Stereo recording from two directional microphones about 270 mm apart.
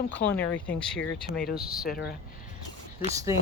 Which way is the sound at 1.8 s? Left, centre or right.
Left.